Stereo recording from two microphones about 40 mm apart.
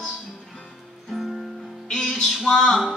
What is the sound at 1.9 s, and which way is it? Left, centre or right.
Music, centre.